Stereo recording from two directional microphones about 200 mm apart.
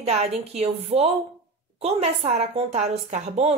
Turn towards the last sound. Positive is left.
turn(degrees=-30)  # may be behind; listen again after turning